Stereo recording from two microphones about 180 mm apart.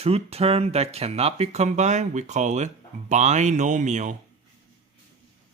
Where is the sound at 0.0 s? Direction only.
35° right (ahead or behind).